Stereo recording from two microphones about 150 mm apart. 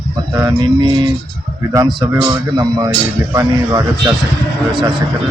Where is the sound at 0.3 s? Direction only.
25° right (ahead or behind).